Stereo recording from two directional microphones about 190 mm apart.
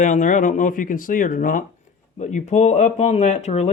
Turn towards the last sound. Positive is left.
turn(degrees=35)  # may be behind; listen again after turning